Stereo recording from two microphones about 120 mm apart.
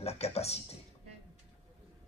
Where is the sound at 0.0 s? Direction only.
60° left (ahead or behind).